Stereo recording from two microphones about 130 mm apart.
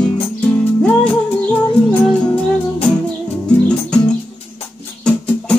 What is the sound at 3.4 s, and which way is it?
Music, 5° left (ahead or behind).